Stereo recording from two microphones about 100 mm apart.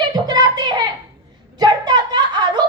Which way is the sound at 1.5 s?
45° right (ahead or behind).